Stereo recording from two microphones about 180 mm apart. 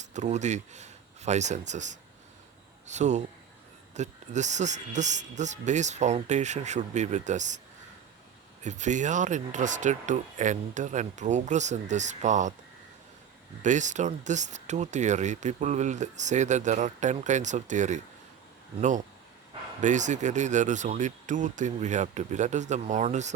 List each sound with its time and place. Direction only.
0.0 s speech: 40° right (ahead or behind)
8.6 s speech: 40° right (ahead or behind)
13.6 s speech: 45° right (ahead or behind)